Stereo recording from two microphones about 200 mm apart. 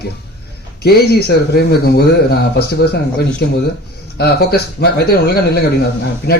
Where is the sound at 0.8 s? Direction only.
50° left (ahead or behind).